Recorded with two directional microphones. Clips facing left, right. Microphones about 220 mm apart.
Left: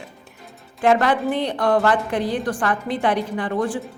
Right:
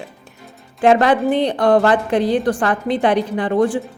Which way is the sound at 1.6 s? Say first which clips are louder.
Right 4 dB; 35° right (ahead or behind).